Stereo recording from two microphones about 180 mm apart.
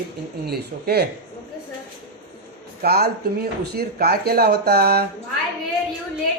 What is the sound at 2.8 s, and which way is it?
Speech, 60° right (ahead or behind).